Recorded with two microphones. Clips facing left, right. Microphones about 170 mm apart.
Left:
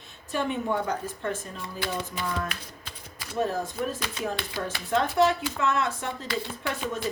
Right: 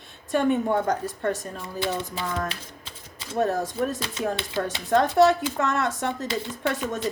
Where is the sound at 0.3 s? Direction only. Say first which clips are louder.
Right 6 dB; 50° right (ahead or behind).